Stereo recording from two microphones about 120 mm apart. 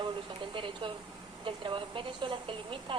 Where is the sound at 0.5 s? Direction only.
45° right (ahead or behind).